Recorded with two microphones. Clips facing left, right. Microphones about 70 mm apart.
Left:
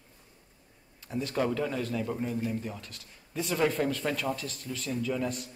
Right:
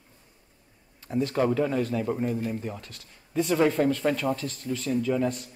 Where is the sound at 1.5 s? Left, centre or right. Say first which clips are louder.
Right 5 dB; centre.